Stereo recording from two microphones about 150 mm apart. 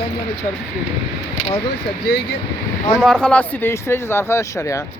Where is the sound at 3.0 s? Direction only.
5° left (ahead or behind); by 4.8 s 20° left (ahead or behind).